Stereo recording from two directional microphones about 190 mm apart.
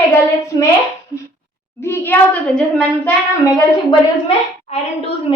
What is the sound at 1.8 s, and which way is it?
Speech, 10° left (ahead or behind).